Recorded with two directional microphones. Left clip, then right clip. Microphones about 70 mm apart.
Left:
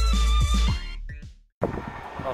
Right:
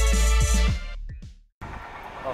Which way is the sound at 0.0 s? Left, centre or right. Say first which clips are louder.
Right 2 dB; centre.